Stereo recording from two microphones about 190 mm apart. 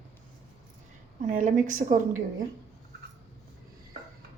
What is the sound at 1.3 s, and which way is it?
Speech, 45° right (ahead or behind).